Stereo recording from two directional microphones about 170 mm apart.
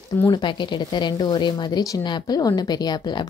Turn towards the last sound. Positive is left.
turn(degrees=25)  # may be behind; listen again after turning